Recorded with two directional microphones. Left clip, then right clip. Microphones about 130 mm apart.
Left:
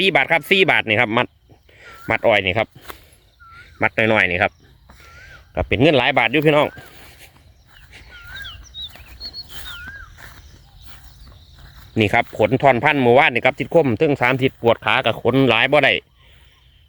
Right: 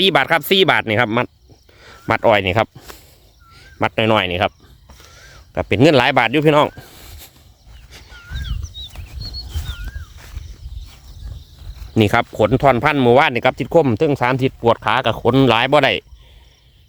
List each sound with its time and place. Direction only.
0.0 s speech: 45° right (ahead or behind)
2.9 s a sound: 30° left (ahead or behind)
3.5 s speech: 35° right (ahead or behind)
5.0 s a sound: 40° right (ahead or behind)
5.8 s speech: 45° right (ahead or behind)
11.9 s speech: 45° right (ahead or behind)